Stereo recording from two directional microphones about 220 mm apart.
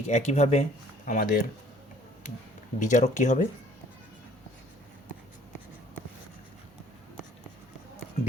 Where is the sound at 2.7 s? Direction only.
35° left (ahead or behind).